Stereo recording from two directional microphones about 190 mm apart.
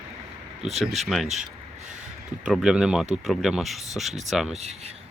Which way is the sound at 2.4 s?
5° right (ahead or behind).